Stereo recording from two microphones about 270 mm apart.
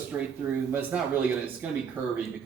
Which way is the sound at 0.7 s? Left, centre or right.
Centre.